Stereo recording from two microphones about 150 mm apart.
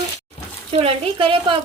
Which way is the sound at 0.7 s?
40° right (ahead or behind).